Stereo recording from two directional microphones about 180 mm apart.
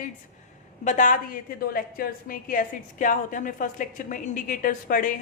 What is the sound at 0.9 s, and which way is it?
A woman's voice, 45° left (ahead or behind).